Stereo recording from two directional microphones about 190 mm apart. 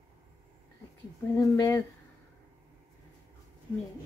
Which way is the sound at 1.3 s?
15° left (ahead or behind).